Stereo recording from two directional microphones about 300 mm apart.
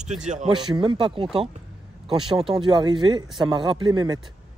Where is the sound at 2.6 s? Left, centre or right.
Centre.